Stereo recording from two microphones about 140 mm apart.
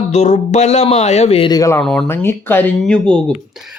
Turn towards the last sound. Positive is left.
turn(degrees=10)  # may be behind; listen again after turning